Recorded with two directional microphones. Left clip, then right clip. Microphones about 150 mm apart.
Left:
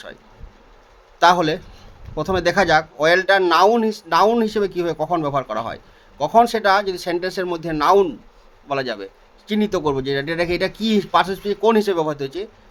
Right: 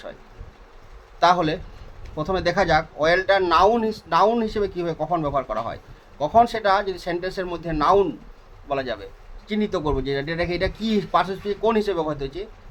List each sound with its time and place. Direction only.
1.2 s speech: 50° left (ahead or behind)